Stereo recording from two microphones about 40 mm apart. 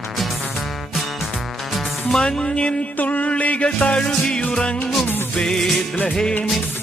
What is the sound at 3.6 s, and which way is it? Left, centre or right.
Speech, left.